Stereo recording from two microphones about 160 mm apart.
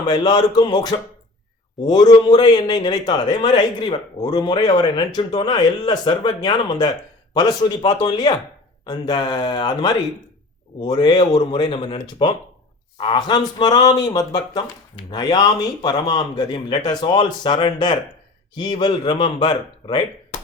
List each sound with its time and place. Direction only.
0.1 s a man's voice: 30° left (ahead or behind)